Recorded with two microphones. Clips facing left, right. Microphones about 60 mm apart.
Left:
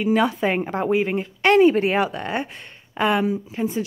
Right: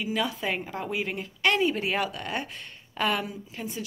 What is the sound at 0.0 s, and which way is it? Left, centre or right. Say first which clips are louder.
Speech: left 9 dB; left.